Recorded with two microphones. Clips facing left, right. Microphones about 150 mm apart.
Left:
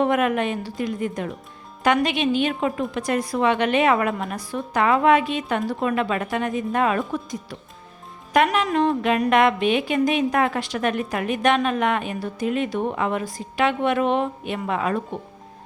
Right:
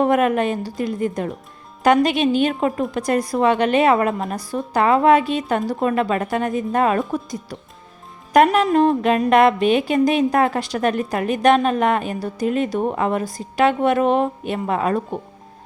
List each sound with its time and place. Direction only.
0.0 s speech: 40° right (ahead or behind)
8.6 s speech: 35° right (ahead or behind)